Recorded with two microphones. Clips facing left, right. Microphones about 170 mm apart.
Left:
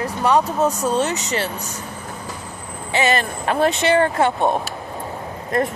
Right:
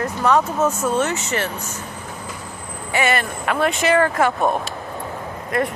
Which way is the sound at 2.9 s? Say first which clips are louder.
Left 1 dB; 30° left (ahead or behind).